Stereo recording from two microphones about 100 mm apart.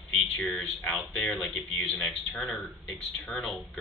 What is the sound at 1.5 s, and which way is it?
Speech, 15° left (ahead or behind).